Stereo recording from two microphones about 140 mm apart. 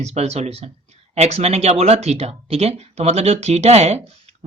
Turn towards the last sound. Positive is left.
turn(degrees=-50)  # may be behind; listen again after turning